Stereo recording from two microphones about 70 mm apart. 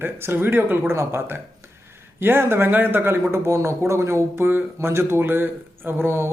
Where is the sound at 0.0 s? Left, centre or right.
Right.